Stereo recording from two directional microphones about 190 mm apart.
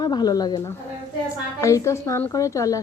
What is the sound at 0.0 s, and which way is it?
A woman's voice, 20° left (ahead or behind).